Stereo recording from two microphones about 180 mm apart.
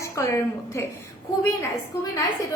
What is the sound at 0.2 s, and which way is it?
Speech, 15° left (ahead or behind).